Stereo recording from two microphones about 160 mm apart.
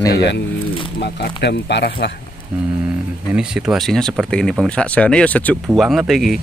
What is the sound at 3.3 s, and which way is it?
Speech, 5° right (ahead or behind).